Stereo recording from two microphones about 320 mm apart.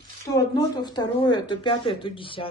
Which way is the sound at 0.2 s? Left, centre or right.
Centre.